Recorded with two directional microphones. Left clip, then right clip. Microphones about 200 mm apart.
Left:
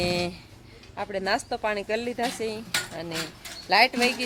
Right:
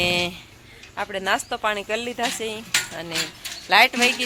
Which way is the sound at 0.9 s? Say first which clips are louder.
Right 3 dB; centre (ahead or behind).